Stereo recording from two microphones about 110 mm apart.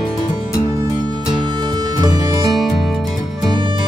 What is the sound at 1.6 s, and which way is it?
Music, 40° right (ahead or behind).